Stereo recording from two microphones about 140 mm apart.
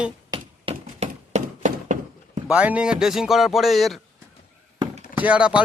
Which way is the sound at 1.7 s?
60° right (ahead or behind).